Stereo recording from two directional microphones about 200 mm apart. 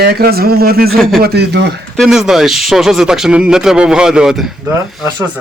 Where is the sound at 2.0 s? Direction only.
Centre (ahead or behind).